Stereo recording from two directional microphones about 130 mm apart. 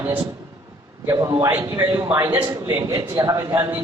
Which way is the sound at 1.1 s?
25° right (ahead or behind).